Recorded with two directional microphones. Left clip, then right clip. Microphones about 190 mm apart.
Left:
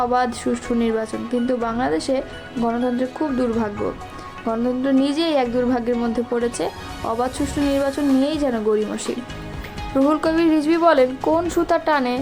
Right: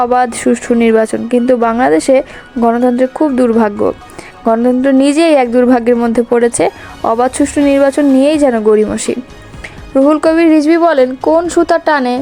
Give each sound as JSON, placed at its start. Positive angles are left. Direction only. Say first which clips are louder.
{"t": 0.0, "sound": "speech", "louder": "right 9 dB", "side_deg": -40}